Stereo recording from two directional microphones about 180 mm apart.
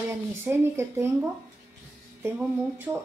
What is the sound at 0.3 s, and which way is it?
Speech, 15° right (ahead or behind).